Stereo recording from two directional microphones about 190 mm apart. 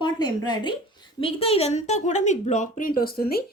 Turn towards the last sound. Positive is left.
turn(degrees=50)  # may be behind; listen again after turning